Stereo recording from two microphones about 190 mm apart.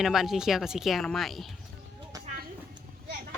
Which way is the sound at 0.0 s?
Centre (ahead or behind).